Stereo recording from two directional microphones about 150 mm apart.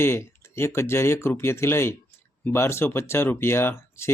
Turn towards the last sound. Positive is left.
turn(degrees=15)  # may be behind; listen again after turning